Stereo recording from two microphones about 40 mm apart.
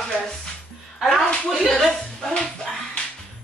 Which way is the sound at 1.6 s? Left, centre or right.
Centre.